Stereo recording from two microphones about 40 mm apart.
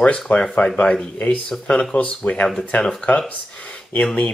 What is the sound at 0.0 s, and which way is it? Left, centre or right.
Speech, left.